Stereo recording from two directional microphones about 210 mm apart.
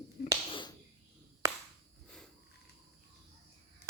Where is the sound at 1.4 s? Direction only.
15° right (ahead or behind).